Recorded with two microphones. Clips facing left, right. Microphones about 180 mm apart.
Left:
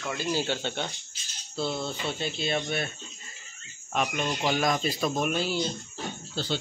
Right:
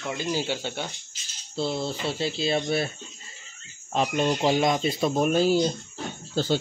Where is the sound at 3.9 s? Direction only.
30° right (ahead or behind).